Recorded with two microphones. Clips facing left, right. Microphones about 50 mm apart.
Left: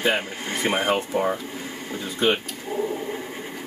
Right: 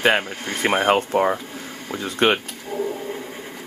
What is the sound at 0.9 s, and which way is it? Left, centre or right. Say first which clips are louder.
Speech: right 4 dB; right.